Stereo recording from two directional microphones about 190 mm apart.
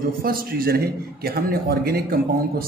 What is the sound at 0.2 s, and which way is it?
A man's voice, 50° right (ahead or behind).